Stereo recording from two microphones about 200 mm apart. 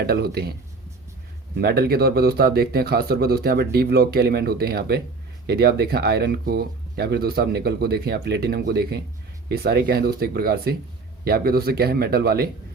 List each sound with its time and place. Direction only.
0.0 s speech: 50° right (ahead or behind)
1.5 s speech: 50° right (ahead or behind)